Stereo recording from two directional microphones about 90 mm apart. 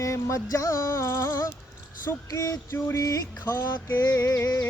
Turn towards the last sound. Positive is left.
turn(degrees=30)  # may be behind; listen again after turning